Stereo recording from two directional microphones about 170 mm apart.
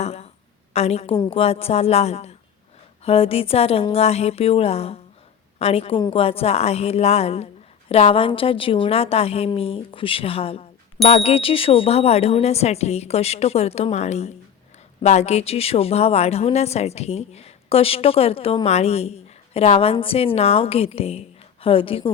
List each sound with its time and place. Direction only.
0.0 s a woman's voice: 40° left (ahead or behind)